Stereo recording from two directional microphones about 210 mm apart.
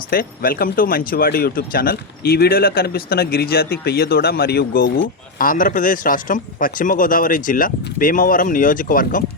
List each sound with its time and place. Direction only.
0.1 s speech: 45° left (ahead or behind)